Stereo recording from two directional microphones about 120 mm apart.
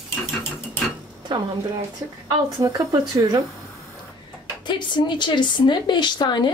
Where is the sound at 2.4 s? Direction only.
30° right (ahead or behind).